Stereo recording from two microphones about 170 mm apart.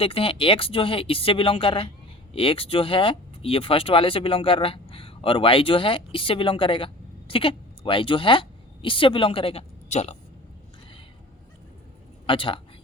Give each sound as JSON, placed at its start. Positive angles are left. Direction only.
{"t": 0.0, "sound": "speech", "side_deg": 35}
{"t": 12.2, "sound": "a man's voice", "side_deg": 30}